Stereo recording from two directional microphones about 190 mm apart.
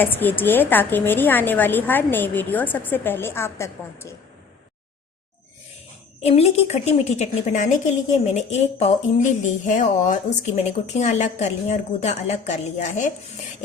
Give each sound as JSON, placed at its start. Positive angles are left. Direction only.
{"t": 0.0, "sound": "a woman's voice", "side_deg": 10}
{"t": 6.2, "sound": "speech", "side_deg": 35}